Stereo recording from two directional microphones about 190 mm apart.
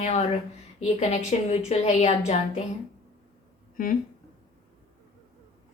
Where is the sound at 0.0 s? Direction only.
35° left (ahead or behind).